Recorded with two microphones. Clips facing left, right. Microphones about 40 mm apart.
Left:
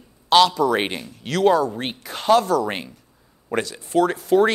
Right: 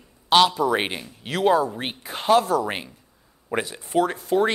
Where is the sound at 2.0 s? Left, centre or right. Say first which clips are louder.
Left 1 dB; centre.